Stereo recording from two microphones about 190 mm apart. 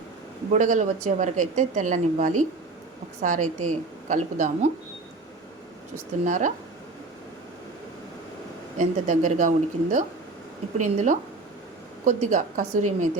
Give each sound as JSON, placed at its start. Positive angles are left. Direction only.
{"t": 0.5, "sound": "a woman's voice", "side_deg": -40}
{"t": 6.2, "sound": "a woman's voice", "side_deg": -40}
{"t": 8.8, "sound": "a woman's voice", "side_deg": -40}